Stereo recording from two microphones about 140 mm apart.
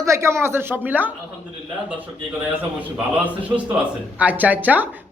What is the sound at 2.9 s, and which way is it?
Speech, 10° right (ahead or behind).